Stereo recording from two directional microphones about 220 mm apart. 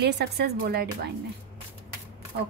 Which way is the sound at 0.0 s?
50° right (ahead or behind).